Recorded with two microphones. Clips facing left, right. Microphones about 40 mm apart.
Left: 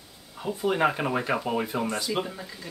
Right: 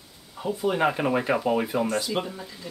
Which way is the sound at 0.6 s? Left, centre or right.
Centre.